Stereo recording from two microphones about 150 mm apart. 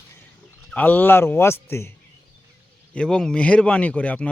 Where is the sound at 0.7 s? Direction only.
10° left (ahead or behind).